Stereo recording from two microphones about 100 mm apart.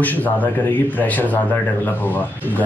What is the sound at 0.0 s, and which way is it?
Speech, 15° left (ahead or behind).